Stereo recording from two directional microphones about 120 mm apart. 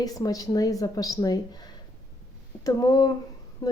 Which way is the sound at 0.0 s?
30° left (ahead or behind).